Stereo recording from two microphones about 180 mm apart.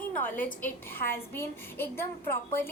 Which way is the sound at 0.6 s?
10° left (ahead or behind).